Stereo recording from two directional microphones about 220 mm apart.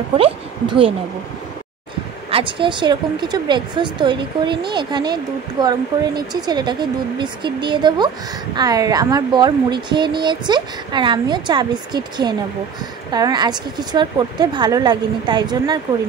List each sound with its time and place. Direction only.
0.2 s speech: 25° right (ahead or behind)
2.3 s speech: 20° right (ahead or behind)